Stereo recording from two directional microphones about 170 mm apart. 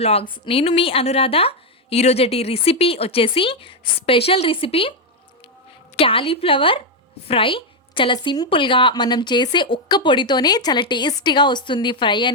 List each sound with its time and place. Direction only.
0.0 s a woman's voice: 35° left (ahead or behind)
6.0 s a woman's voice: 30° left (ahead or behind)